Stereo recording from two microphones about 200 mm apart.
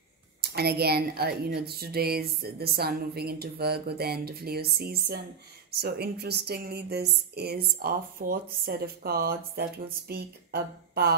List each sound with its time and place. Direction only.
0.4 s speech: 55° right (ahead or behind)